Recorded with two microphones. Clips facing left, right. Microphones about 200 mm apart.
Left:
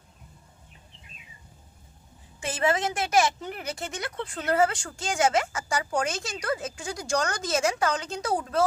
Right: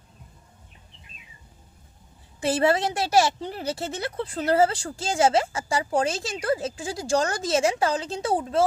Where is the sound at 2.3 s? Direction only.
35° right (ahead or behind).